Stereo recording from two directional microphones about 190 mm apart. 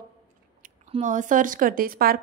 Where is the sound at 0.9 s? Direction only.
40° right (ahead or behind).